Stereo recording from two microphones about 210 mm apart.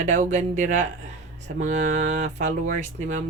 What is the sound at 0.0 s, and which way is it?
Speech, 35° right (ahead or behind).